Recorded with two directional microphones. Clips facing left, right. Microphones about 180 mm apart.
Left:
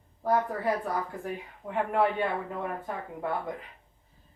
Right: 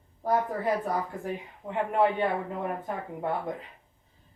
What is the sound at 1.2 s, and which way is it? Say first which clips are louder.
Speech: right 1 dB; 20° right (ahead or behind).